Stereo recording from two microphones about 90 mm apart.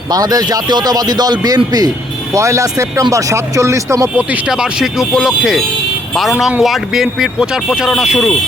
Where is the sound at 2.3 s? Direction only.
35° right (ahead or behind).